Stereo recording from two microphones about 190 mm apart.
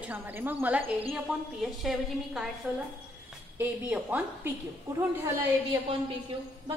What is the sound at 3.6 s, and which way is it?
Speech, 10° right (ahead or behind).